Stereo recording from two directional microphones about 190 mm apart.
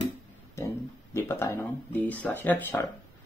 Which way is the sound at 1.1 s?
15° left (ahead or behind).